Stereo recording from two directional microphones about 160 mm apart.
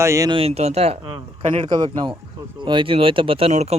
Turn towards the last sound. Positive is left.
turn(degrees=-40)  # may be behind; listen again after turning